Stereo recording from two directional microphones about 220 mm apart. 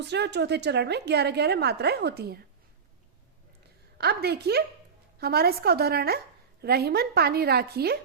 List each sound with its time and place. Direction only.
0.0 s a woman's voice: 50° right (ahead or behind)
3.9 s a woman's voice: 45° right (ahead or behind)